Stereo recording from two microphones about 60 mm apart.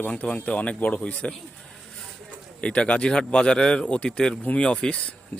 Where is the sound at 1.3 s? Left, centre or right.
Centre.